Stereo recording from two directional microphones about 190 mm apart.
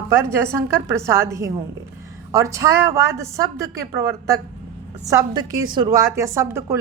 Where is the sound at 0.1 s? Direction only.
15° right (ahead or behind).